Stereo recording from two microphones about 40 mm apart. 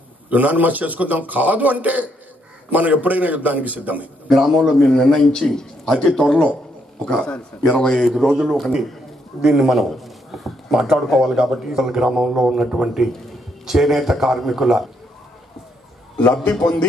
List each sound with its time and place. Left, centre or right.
0.3 s a man's voice: right
4.3 s a man's voice: centre
4.9 s a man's voice: centre
7.7 s a man's voice: left
8.0 s a man's voice: centre
16.2 s a man's voice: left